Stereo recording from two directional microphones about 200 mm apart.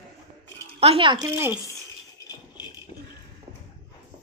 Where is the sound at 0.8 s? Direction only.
30° right (ahead or behind).